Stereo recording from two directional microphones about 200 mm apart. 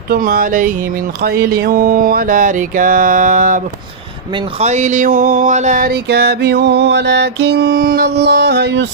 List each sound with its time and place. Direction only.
0.1 s mantra: 45° right (ahead or behind)